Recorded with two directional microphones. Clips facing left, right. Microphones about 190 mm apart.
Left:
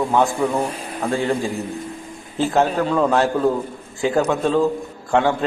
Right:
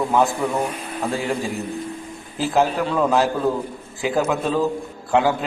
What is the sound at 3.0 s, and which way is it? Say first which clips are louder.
Speech: even; 5° right (ahead or behind).